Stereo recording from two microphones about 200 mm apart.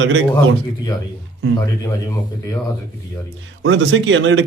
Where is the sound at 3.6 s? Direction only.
70° right (ahead or behind).